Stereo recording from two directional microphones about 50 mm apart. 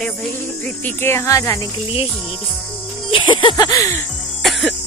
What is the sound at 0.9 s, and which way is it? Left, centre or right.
Speech, left.